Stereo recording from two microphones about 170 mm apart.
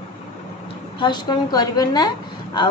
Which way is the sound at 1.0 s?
25° left (ahead or behind).